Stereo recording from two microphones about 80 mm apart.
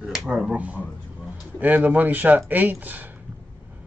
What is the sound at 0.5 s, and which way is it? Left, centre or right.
Speech, centre.